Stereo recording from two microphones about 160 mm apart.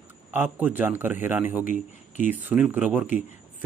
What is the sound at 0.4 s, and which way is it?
Speech, 10° right (ahead or behind).